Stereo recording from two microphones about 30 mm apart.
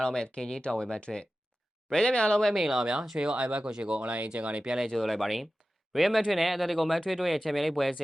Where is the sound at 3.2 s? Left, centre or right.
Right.